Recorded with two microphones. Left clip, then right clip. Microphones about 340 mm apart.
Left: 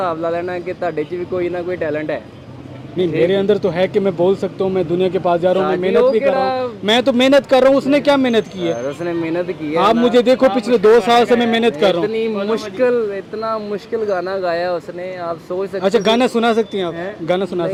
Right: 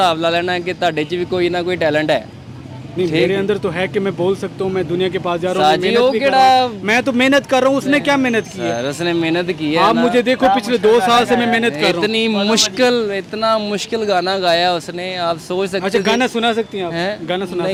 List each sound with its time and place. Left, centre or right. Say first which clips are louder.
0.0 s a man's voice: right 4 dB; right
3.2 s speech: left 2 dB; centre
5.9 s a man's voice: even; right
6.8 s speech: left 1 dB; centre
8.6 s a man's voice: right 1 dB; right
9.7 s speech: left 1 dB; centre
12.3 s a man's voice: right 4 dB; right
15.8 s speech: left 3 dB; centre